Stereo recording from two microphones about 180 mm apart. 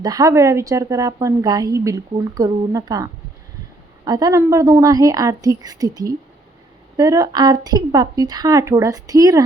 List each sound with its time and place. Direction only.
0.0 s a woman's voice: 20° right (ahead or behind)